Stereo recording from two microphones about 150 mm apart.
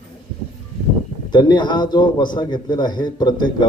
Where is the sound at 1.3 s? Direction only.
30° left (ahead or behind).